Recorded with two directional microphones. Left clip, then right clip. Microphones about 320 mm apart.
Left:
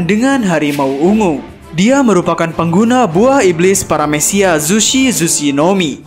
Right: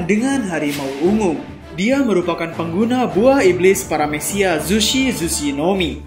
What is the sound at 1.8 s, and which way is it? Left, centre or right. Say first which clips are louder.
A man's voice: left 6 dB; left.